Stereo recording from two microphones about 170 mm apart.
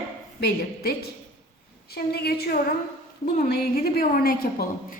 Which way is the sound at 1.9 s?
70° left (ahead or behind).